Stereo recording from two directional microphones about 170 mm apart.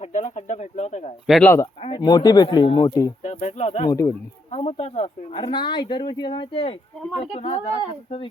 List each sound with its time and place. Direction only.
0.0 s speech: 45° left (ahead or behind)
1.3 s speech: 5° left (ahead or behind)
1.8 s speech: 30° left (ahead or behind)
3.2 s speech: 40° left (ahead or behind)
3.8 s speech: 20° left (ahead or behind)
4.5 s speech: 40° left (ahead or behind)